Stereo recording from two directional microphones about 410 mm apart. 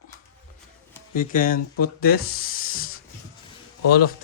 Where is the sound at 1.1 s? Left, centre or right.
Centre.